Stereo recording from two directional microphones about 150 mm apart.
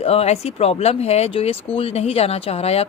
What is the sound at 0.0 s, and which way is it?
Speech, 45° left (ahead or behind).